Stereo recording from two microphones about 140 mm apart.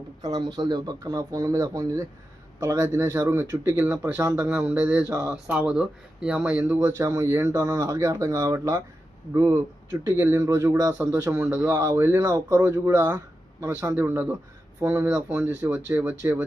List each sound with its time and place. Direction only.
0.2 s speech: 25° right (ahead or behind); by 6.7 s 10° right (ahead or behind)
6.7 s speech: 25° right (ahead or behind)